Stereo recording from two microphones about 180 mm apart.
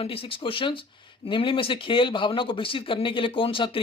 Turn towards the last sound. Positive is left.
turn(degrees=30)  # may be behind; listen again after turning